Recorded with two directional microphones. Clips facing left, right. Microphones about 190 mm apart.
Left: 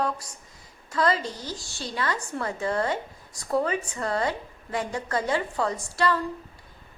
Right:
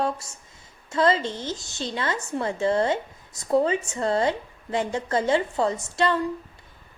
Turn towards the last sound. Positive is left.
turn(degrees=-25)  # may be behind; listen again after turning